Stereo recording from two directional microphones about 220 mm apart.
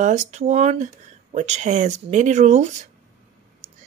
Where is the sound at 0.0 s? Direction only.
30° right (ahead or behind).